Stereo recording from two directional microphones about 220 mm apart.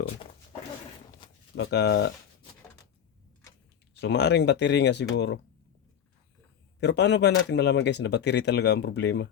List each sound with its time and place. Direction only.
1.5 s speech: 50° left (ahead or behind)
4.0 s speech: 50° left (ahead or behind)
6.7 s speech: 50° left (ahead or behind)